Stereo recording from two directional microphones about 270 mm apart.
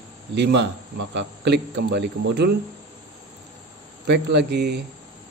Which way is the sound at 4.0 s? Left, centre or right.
Right.